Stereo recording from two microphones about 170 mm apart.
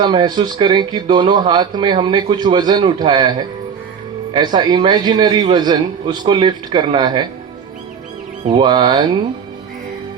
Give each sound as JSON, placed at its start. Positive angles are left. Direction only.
{"t": 0.0, "sound": "speech", "side_deg": -25}
{"t": 4.4, "sound": "speech", "side_deg": -25}
{"t": 8.5, "sound": "speech", "side_deg": -25}